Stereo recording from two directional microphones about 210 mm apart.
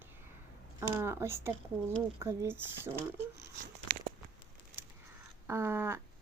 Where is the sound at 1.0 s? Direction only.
10° right (ahead or behind).